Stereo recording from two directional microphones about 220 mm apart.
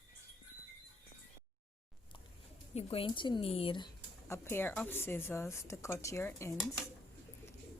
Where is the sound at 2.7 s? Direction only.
25° left (ahead or behind).